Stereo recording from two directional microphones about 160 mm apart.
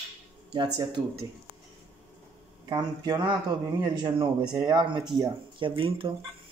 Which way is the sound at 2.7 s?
25° right (ahead or behind).